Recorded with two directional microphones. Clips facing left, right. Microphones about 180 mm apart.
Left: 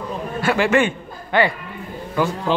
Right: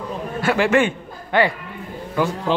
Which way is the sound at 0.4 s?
45° right (ahead or behind).